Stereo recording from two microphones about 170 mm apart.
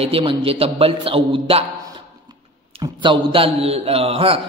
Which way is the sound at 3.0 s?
30° right (ahead or behind).